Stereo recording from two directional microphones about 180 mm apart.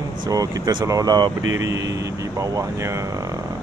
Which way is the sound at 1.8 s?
20° right (ahead or behind).